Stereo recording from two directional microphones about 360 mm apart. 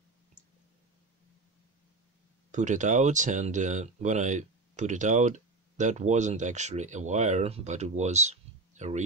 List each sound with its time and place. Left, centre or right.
2.5 s speech: right